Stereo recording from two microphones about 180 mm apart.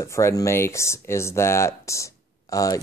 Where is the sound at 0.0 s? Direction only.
15° left (ahead or behind).